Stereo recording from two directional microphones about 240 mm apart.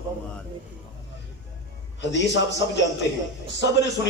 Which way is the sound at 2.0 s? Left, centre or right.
Left.